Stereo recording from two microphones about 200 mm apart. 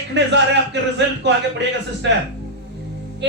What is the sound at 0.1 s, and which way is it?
Speech, 60° right (ahead or behind).